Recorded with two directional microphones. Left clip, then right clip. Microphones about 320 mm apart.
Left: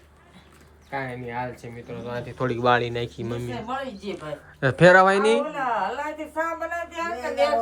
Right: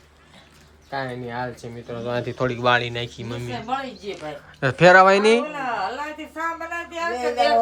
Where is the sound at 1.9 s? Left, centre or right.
Right.